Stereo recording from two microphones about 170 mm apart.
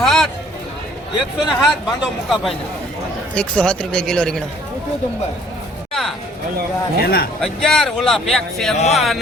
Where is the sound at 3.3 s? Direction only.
5° left (ahead or behind).